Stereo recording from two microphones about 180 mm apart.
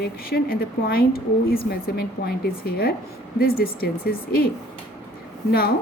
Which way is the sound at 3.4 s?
55° left (ahead or behind).